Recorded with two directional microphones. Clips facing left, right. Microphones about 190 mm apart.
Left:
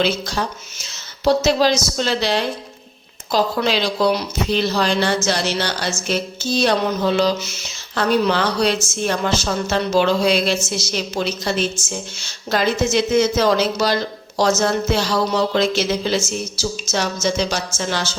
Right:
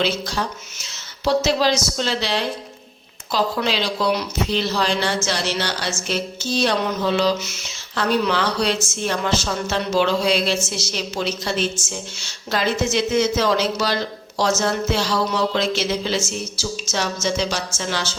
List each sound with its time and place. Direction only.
1.2 s speech: 40° left (ahead or behind)
3.3 s speech: 40° left (ahead or behind)